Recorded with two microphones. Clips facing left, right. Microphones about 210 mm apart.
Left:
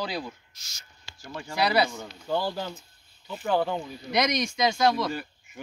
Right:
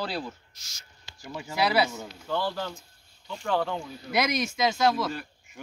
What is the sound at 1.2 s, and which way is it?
Speech, 5° right (ahead or behind).